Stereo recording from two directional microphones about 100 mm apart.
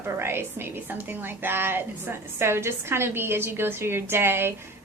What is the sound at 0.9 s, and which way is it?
A woman's voice, 20° right (ahead or behind).